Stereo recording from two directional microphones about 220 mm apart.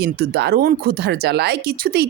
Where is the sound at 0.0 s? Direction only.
50° right (ahead or behind).